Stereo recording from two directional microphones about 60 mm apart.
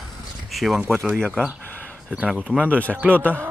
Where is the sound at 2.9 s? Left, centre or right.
Right.